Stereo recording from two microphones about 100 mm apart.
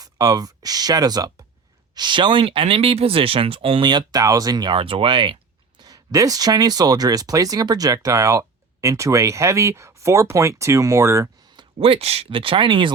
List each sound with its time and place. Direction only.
0.0 s speech: 40° right (ahead or behind)
2.0 s speech: 50° right (ahead or behind)
3.8 s speech: 40° right (ahead or behind)
4.8 s speech: 65° right (ahead or behind); by 11.3 s 30° right (ahead or behind)
11.8 s speech: 80° right; by 12.9 s 55° right (ahead or behind)